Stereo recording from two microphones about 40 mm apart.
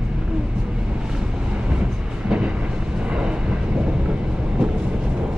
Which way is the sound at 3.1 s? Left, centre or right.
Right.